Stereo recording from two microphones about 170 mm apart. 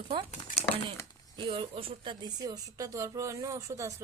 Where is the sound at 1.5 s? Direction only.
35° right (ahead or behind); by 4.0 s 20° right (ahead or behind).